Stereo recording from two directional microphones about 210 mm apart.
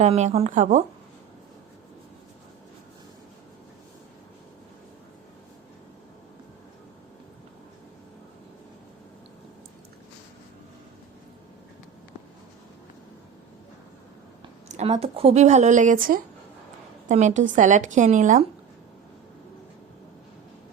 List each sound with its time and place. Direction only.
0.0 s speech: 30° right (ahead or behind)
14.7 s speech: 30° right (ahead or behind)